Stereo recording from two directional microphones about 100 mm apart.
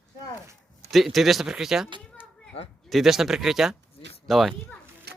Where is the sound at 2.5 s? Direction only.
90° left.